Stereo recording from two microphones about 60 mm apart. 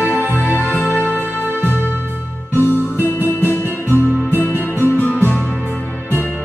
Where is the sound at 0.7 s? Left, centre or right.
Left.